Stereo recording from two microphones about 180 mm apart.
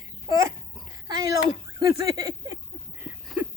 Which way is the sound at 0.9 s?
20° right (ahead or behind).